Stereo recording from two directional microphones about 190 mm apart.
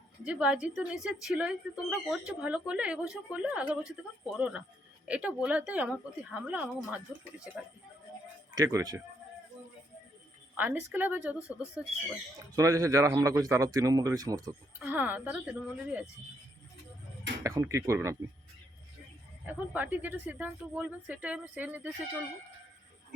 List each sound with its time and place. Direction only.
0.3 s a woman's voice: 5° right (ahead or behind)
8.5 s speech: 20° right (ahead or behind)
10.6 s a woman's voice: 10° right (ahead or behind)
12.5 s a woman's voice: 20° right (ahead or behind)
14.8 s a woman's voice: 10° right (ahead or behind)
17.4 s a woman's voice: 15° right (ahead or behind)
19.5 s a woman's voice: 10° right (ahead or behind)